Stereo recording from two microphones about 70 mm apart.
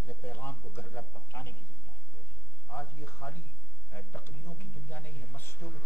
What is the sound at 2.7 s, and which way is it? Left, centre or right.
Speech, left.